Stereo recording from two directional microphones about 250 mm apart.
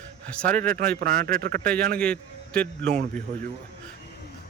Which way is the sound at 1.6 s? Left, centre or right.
Centre.